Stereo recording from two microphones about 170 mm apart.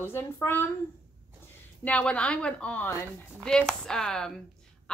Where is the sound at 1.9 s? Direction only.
5° left (ahead or behind).